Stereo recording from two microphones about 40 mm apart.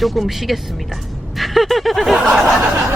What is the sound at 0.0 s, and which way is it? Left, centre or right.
Speech, centre.